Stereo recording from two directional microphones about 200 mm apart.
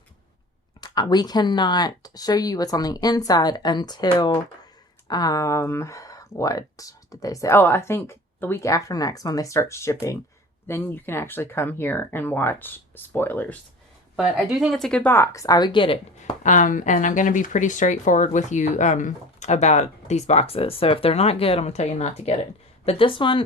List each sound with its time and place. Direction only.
0.8 s speech: 20° left (ahead or behind)
14.2 s speech: centre (ahead or behind); by 16.3 s 25° left (ahead or behind)
16.4 s speech: 40° left (ahead or behind)